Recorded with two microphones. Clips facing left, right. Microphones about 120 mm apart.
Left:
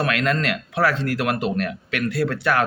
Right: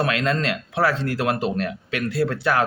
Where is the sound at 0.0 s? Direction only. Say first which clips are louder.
Even; 30° right (ahead or behind).